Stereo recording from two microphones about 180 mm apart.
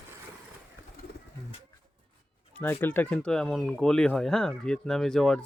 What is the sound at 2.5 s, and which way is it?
Speech, 10° left (ahead or behind).